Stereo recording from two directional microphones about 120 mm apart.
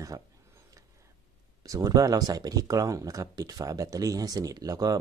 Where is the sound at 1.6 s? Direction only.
30° right (ahead or behind).